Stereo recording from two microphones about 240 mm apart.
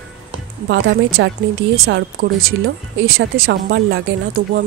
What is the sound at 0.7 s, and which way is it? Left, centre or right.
Speech, right.